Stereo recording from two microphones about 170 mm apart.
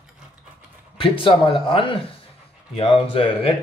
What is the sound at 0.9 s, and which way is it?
Speech, 30° left (ahead or behind).